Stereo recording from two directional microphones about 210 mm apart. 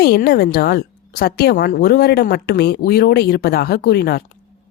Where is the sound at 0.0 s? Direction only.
50° left (ahead or behind).